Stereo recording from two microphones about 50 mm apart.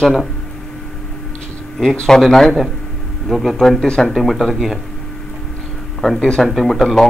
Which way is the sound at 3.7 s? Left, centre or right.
Centre.